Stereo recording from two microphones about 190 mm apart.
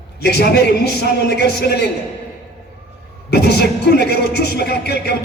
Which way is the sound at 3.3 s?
60° left (ahead or behind).